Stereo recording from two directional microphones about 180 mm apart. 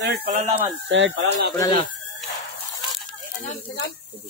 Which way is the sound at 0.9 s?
90° right.